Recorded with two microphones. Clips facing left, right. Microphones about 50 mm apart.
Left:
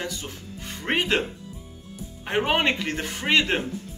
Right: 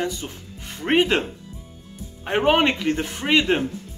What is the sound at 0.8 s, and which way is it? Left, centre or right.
Speech, centre.